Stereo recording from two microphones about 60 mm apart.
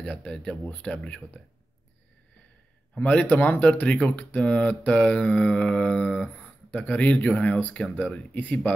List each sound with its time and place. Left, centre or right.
0.0 s speech: centre
3.0 s speech: left